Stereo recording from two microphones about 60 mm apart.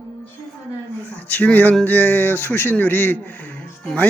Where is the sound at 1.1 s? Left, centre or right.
Left.